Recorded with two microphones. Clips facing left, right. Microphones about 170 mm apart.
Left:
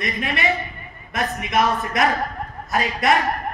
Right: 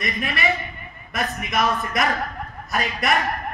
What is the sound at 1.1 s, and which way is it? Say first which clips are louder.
A woman's voice: left 3 dB; 25° left (ahead or behind).